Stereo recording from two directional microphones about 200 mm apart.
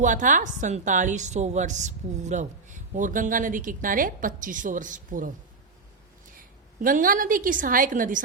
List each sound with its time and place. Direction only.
0.0 s a woman's voice: 40° right (ahead or behind)
6.8 s a woman's voice: 45° right (ahead or behind)